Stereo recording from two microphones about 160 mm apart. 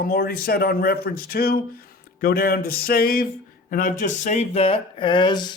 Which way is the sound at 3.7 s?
55° left (ahead or behind).